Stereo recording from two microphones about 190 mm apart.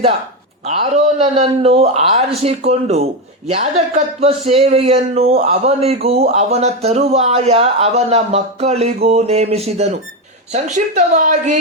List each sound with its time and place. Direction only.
0.6 s speech: 35° right (ahead or behind)